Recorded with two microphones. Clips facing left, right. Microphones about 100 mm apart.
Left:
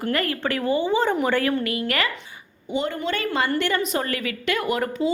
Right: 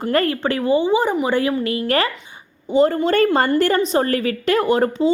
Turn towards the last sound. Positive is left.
turn(degrees=-30)  # may be behind; listen again after turning